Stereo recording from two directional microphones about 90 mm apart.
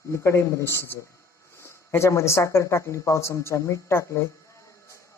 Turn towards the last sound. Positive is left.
turn(degrees=30)  # may be behind; listen again after turning